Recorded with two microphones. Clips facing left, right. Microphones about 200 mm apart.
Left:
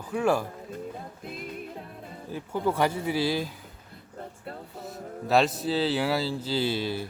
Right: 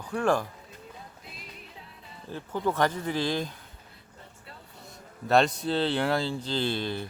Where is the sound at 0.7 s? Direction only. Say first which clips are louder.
Left 10 dB; 50° left (ahead or behind).